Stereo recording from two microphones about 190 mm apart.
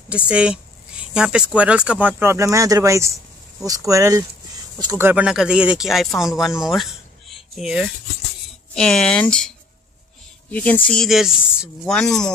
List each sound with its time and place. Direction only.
0.1 s speech: 5° right (ahead or behind)
6.6 s a sound: centre (ahead or behind)
8.7 s speech: 5° left (ahead or behind)
10.5 s speech: 5° left (ahead or behind)